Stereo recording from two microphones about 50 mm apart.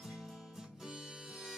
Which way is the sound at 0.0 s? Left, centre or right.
Centre.